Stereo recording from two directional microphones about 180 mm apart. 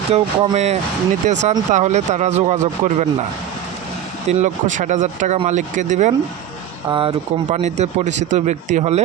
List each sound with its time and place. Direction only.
0.1 s speech: 35° right (ahead or behind)
4.3 s speech: 40° right (ahead or behind)
6.8 s speech: 30° right (ahead or behind)